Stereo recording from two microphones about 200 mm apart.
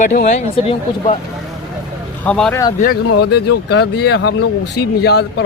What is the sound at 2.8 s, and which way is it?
A man's voice, 50° left (ahead or behind).